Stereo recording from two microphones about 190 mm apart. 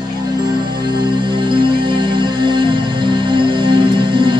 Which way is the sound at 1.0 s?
25° right (ahead or behind).